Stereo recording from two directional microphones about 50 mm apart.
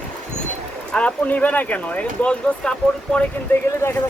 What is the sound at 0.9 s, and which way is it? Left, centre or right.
Speech, left.